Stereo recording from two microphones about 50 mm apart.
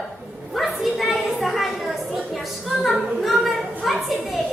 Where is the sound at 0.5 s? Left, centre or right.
Centre.